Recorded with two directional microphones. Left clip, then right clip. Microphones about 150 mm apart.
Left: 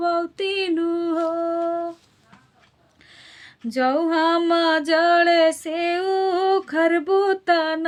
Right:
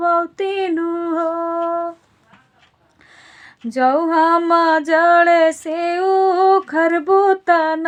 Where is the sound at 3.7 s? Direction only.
35° left (ahead or behind).